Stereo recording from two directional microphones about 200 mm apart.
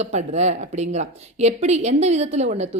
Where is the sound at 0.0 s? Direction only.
35° right (ahead or behind).